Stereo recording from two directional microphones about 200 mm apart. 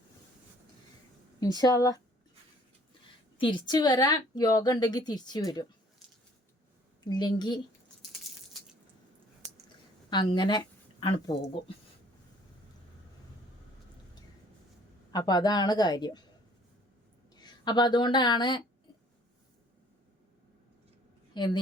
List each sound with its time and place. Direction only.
1.4 s a woman's voice: 20° left (ahead or behind)
3.3 s a woman's voice: 20° left (ahead or behind)
7.0 s a woman's voice: 20° left (ahead or behind)
10.1 s a woman's voice: 20° left (ahead or behind)
15.1 s a woman's voice: 20° left (ahead or behind)
17.3 s speech: 20° left (ahead or behind)
21.3 s a woman's voice: 20° left (ahead or behind)